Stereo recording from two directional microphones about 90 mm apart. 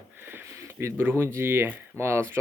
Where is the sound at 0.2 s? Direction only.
25° right (ahead or behind).